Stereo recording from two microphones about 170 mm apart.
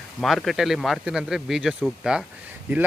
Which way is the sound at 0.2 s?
Centre (ahead or behind).